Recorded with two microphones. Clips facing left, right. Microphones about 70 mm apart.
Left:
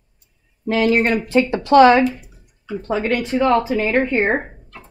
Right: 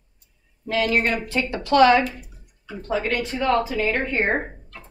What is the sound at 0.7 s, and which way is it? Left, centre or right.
Speech, left.